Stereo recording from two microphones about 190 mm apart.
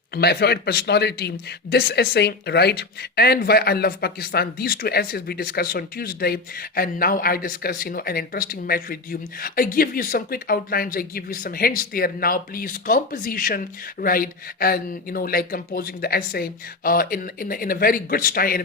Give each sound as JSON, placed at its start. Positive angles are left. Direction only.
{"t": 0.2, "sound": "speech", "side_deg": 55}